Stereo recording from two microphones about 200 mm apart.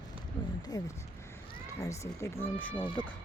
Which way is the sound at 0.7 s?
20° left (ahead or behind).